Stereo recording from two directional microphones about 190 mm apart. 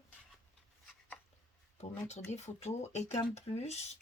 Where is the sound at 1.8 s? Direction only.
35° left (ahead or behind).